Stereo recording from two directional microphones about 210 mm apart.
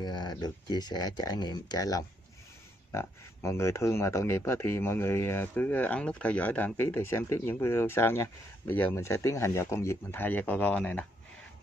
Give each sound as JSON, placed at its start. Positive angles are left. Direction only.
{"t": 0.0, "sound": "speech", "side_deg": 20}